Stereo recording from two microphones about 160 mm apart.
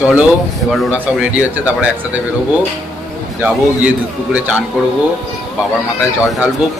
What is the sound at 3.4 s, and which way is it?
Speech, 10° right (ahead or behind).